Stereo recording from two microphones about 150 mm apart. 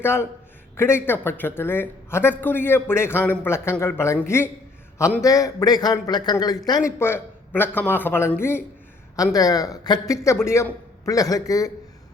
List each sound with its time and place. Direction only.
0.0 s a man's voice: 15° left (ahead or behind)
7.0 s a man's voice: 15° left (ahead or behind)